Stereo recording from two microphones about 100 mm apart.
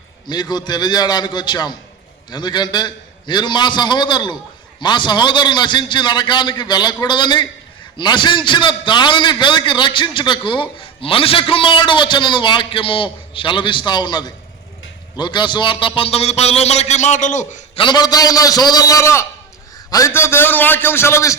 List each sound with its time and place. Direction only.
0.3 s a man's voice: 45° left (ahead or behind); by 16.9 s 90° left
17.7 s a man's voice: 50° left (ahead or behind); by 21.3 s 30° left (ahead or behind)